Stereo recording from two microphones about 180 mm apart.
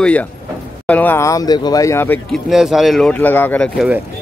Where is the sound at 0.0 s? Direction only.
10° left (ahead or behind).